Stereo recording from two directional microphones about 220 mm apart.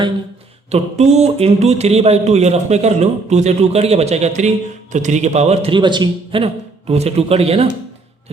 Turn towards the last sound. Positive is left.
turn(degrees=-25)  # may be behind; listen again after turning